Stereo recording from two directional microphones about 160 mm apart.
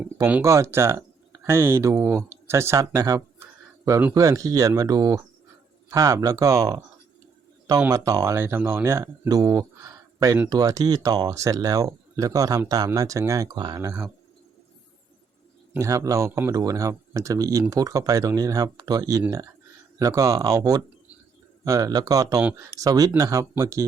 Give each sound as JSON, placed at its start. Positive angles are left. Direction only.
{"t": 0.0, "sound": "speech", "side_deg": -10}
{"t": 7.8, "sound": "speech", "side_deg": -20}
{"t": 15.7, "sound": "speech", "side_deg": -20}